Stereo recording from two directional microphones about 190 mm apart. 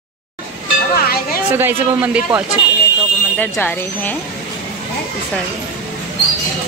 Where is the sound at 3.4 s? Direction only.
10° left (ahead or behind).